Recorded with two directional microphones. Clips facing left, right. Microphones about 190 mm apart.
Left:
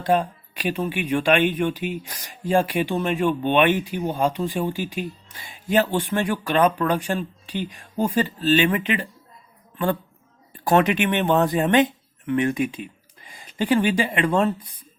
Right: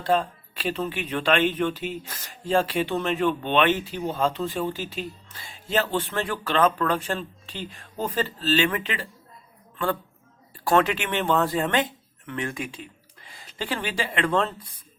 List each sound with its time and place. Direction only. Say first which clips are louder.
0.0 s a woman's voice: left 2 dB; 15° left (ahead or behind)